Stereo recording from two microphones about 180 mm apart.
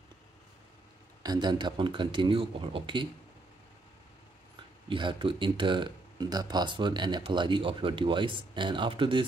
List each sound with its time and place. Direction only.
1.2 s speech: 25° right (ahead or behind)
4.8 s speech: 25° right (ahead or behind)